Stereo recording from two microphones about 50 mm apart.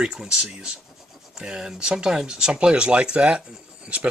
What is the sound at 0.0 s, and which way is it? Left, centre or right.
Speech, centre.